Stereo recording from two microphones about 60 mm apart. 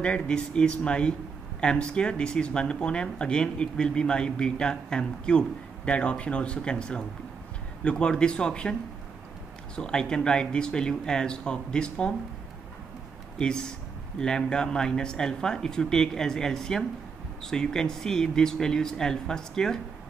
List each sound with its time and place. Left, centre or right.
0.0 s speech: centre
9.8 s speech: centre
13.4 s speech: centre